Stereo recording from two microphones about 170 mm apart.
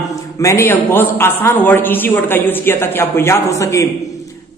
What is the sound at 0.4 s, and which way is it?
A woman's voice, 15° left (ahead or behind).